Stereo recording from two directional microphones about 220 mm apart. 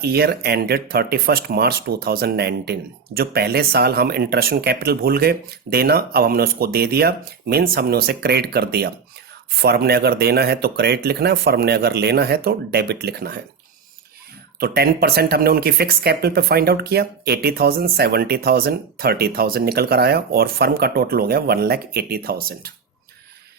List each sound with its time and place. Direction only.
0.0 s speech: 45° right (ahead or behind)
14.6 s speech: 45° right (ahead or behind)